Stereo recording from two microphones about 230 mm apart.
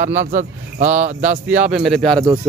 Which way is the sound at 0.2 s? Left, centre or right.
Right.